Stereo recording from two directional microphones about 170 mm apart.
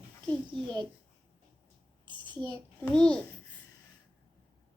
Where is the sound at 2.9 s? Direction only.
5° left (ahead or behind).